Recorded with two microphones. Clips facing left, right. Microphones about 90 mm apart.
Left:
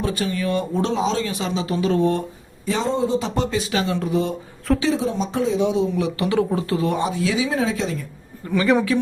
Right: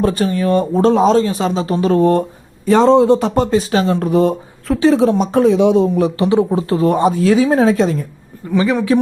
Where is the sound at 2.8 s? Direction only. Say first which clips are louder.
Right 11 dB; 80° right.